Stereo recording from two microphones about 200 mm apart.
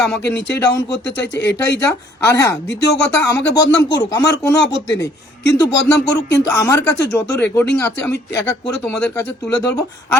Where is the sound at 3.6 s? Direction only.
60° left (ahead or behind).